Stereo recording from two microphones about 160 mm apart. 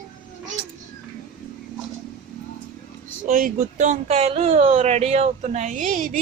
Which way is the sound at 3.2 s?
55° right (ahead or behind).